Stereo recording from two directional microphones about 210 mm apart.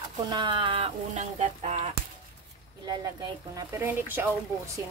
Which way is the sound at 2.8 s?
15° right (ahead or behind).